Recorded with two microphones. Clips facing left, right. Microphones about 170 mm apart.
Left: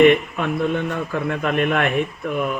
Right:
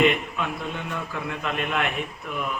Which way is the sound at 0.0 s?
55° left (ahead or behind).